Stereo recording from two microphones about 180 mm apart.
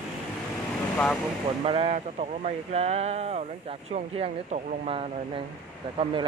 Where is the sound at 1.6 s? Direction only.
30° right (ahead or behind).